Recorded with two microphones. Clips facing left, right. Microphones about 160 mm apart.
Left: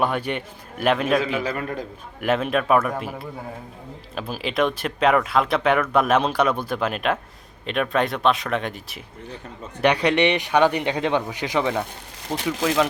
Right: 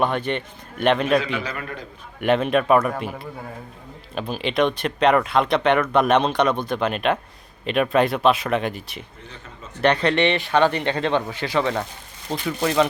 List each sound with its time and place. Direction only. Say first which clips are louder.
0.0 s speech: right 1 dB; 10° left (ahead or behind)
1.4 s a man's voice: left 4 dB; 45° left (ahead or behind)
2.2 s speech: right 3 dB; centre (ahead or behind)
12.4 s speech: left 2 dB; 90° left
12.6 s speech: right 2 dB; 5° left (ahead or behind)